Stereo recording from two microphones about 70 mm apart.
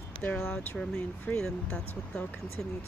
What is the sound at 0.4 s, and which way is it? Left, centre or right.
Speech, left.